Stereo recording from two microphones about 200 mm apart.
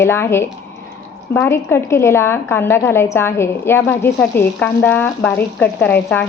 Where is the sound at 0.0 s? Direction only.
10° left (ahead or behind).